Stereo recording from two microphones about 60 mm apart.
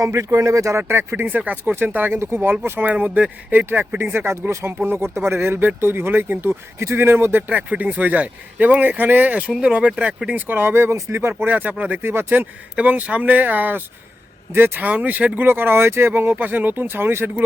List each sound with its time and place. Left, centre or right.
0.0 s speech: right
0.8 s speech: right
1.2 s a man's voice: right
4.3 s speech: right
6.7 s speech: right
7.4 s a man's voice: right
10.3 s a man's voice: right
14.8 s a man's voice: right
15.4 s speech: right
16.8 s speech: right